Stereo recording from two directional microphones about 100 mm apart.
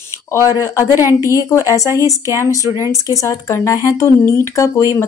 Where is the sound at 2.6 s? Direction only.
30° right (ahead or behind).